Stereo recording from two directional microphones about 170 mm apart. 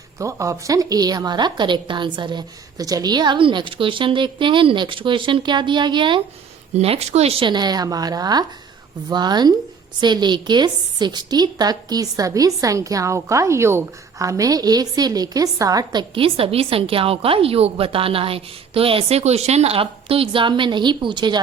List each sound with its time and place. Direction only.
0.2 s a woman's voice: 20° right (ahead or behind)